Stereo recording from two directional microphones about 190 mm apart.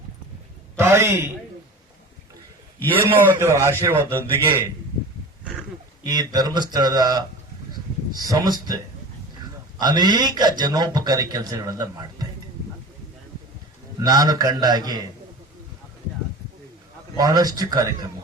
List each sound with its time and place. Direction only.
0.8 s a man's voice: 15° right (ahead or behind)
3.0 s a man's voice: 10° right (ahead or behind)
6.0 s speech: 20° right (ahead or behind)
14.0 s speech: 20° right (ahead or behind)
17.2 s speech: 20° right (ahead or behind)